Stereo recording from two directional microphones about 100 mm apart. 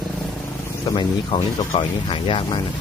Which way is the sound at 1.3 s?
40° left (ahead or behind).